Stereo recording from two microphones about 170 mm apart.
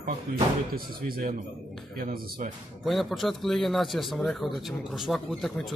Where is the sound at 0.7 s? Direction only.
60° right (ahead or behind).